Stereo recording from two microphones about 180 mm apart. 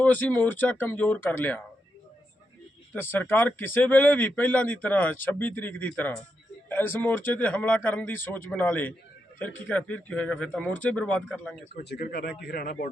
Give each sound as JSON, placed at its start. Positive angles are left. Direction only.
{"t": 0.0, "sound": "speech", "side_deg": 10}
{"t": 2.9, "sound": "speech", "side_deg": 10}
{"t": 11.8, "sound": "speech", "side_deg": 60}